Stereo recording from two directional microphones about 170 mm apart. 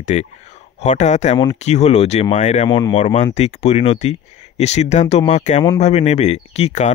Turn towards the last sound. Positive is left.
turn(degrees=40)  # may be behind; listen again after turning